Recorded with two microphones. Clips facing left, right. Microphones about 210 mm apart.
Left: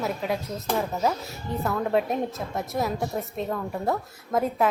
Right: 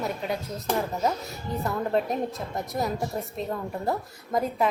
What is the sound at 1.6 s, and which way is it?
A woman's voice, centre (ahead or behind).